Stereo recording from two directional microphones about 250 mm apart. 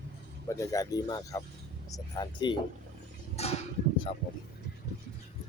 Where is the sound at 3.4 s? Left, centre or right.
Left.